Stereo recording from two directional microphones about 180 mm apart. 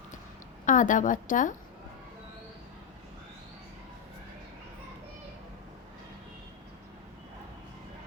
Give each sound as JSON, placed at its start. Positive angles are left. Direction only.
{"t": 0.6, "sound": "a woman's voice", "side_deg": 45}